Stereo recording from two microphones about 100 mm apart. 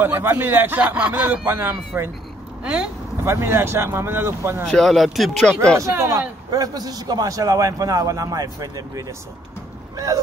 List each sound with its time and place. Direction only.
0.0 s speech: 20° right (ahead or behind)
2.6 s speech: 10° right (ahead or behind)
3.3 s speech: 25° right (ahead or behind)
4.6 s speech: 5° left (ahead or behind)
5.4 s speech: 10° left (ahead or behind)
5.8 s a man's voice: 30° right (ahead or behind)